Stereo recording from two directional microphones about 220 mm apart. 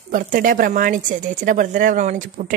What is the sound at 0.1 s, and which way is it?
A woman's voice, 40° right (ahead or behind).